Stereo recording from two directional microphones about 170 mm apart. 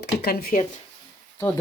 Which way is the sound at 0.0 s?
70° left (ahead or behind).